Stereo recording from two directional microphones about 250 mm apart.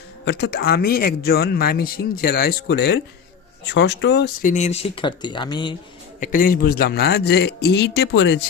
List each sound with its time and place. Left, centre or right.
0.3 s a man's voice: left
4.5 s speech: left
6.1 s a man's voice: left